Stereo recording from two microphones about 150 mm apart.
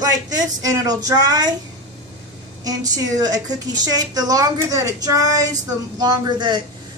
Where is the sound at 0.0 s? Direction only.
25° right (ahead or behind).